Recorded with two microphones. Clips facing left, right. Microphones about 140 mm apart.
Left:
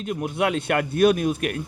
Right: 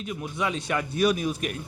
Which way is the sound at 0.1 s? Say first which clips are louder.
Left 6 dB; 60° left (ahead or behind).